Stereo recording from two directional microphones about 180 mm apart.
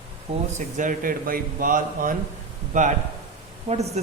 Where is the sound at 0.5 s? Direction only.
45° right (ahead or behind).